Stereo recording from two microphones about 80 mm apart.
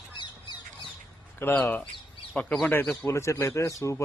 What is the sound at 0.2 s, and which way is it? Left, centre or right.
Squawk, left.